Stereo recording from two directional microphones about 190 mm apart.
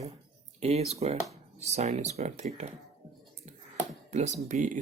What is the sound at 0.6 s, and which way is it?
Speech, 35° right (ahead or behind).